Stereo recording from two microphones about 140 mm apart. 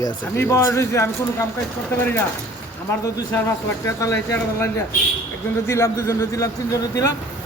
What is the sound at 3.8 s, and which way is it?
Speech, 25° left (ahead or behind).